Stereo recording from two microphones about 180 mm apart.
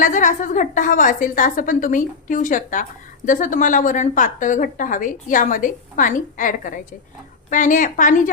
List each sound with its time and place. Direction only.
0.0 s a woman's voice: 45° left (ahead or behind)